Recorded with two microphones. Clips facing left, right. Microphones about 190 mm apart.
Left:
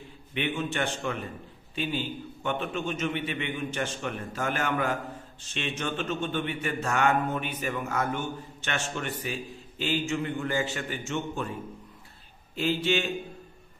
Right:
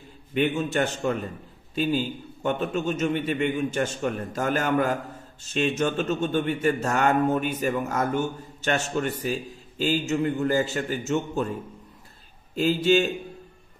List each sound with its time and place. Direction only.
0.3 s a man's voice: 40° right (ahead or behind)
12.5 s a man's voice: 40° right (ahead or behind)